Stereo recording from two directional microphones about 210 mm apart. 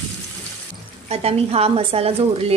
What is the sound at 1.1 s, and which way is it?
Speech, 30° right (ahead or behind).